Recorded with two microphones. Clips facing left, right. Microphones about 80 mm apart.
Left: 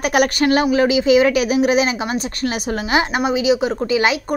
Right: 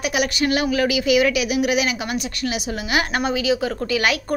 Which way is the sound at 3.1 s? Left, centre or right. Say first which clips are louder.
Left 4 dB; centre.